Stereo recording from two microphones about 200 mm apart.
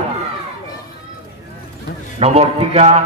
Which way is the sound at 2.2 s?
30° right (ahead or behind).